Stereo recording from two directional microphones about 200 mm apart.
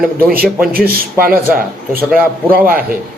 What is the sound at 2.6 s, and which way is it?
Speech, 45° right (ahead or behind).